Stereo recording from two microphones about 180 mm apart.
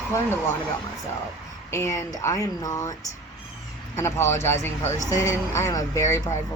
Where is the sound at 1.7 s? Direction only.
15° left (ahead or behind).